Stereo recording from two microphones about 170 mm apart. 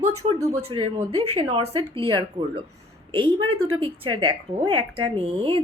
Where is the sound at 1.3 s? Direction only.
35° right (ahead or behind).